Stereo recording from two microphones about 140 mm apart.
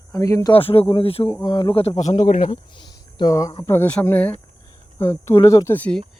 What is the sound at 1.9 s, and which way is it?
Speech, 60° left (ahead or behind).